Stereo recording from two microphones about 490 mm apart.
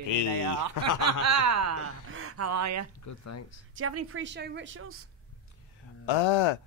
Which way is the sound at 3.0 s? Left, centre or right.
Left.